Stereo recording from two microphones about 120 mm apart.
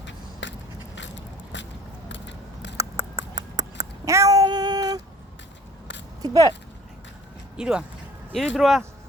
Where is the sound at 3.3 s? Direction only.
30° right (ahead or behind).